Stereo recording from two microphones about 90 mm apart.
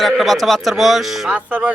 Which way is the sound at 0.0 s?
Centre (ahead or behind).